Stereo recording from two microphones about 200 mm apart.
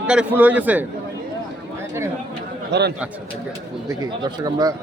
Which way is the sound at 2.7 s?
55° right (ahead or behind).